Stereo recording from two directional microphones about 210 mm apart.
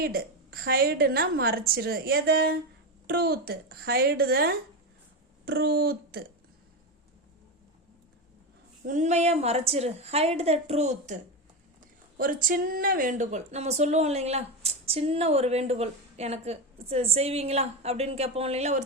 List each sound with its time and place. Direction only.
0.0 s a woman's voice: 45° right (ahead or behind)
8.8 s speech: 35° right (ahead or behind)